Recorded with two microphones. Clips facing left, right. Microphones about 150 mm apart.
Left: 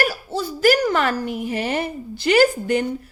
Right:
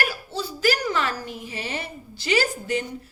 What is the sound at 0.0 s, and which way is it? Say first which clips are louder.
A woman's voice: left 5 dB; 40° left (ahead or behind).